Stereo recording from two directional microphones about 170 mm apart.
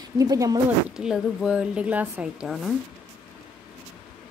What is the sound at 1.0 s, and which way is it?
Speech, 5° right (ahead or behind).